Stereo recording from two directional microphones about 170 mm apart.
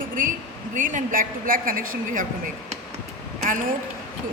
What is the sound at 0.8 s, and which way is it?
A woman's voice, 50° right (ahead or behind).